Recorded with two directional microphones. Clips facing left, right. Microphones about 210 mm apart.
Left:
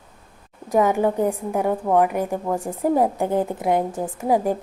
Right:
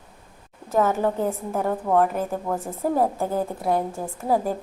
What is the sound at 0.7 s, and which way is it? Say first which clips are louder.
A woman's voice: left 3 dB; 15° left (ahead or behind).